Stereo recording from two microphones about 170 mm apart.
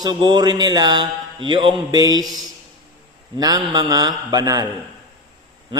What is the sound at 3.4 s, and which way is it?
A man's voice, 20° right (ahead or behind).